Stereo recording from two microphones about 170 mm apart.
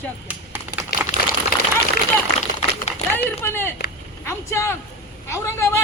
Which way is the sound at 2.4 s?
40° left (ahead or behind).